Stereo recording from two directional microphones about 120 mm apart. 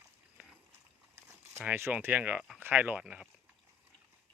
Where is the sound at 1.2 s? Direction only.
25° right (ahead or behind).